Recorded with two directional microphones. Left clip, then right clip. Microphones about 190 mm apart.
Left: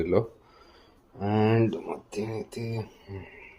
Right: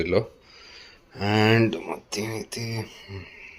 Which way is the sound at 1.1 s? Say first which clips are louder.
Right 4 dB; 5° right (ahead or behind).